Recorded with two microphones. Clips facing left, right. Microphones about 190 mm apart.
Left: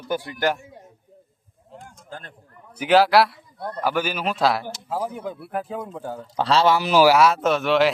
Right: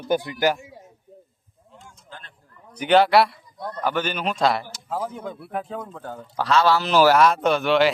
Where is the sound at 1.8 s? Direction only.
55° left (ahead or behind).